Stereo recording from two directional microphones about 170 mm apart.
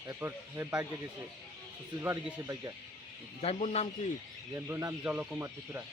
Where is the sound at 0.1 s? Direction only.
15° right (ahead or behind).